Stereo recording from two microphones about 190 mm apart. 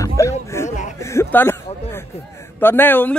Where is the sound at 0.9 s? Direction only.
15° left (ahead or behind).